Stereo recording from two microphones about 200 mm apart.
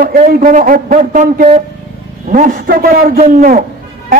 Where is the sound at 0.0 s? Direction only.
45° right (ahead or behind).